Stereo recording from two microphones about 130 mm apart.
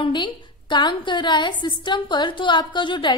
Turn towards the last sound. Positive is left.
turn(degrees=35)  # may be behind; listen again after turning